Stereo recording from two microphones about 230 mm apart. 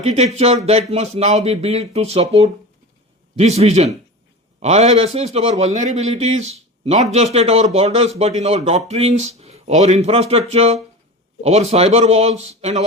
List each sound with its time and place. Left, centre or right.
0.3 s a man's voice: right